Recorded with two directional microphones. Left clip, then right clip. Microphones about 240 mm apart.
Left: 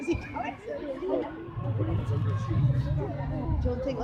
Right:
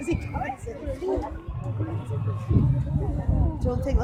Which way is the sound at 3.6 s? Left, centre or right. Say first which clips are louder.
Right 2 dB; right.